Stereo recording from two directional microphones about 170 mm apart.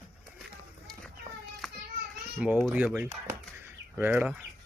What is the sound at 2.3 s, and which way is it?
Speech, 5° right (ahead or behind).